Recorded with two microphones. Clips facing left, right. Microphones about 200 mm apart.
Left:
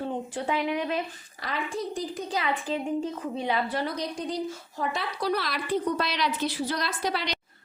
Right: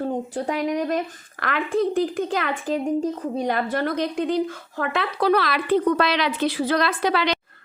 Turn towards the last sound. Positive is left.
turn(degrees=-80)